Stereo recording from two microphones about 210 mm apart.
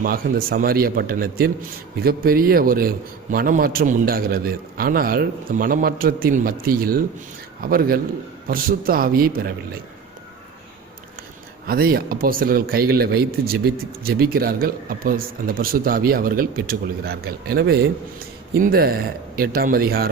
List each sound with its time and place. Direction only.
0.0 s a man's voice: 45° right (ahead or behind)
11.6 s a man's voice: 45° right (ahead or behind)